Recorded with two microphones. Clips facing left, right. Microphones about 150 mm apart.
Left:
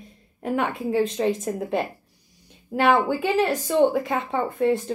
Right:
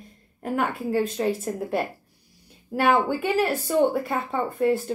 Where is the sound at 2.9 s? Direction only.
5° left (ahead or behind).